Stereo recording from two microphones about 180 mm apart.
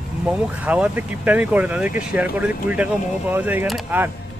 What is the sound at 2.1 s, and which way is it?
Speech, 10° right (ahead or behind).